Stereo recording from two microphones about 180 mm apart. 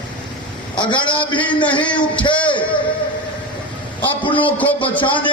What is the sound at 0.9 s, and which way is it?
Speech, 25° left (ahead or behind).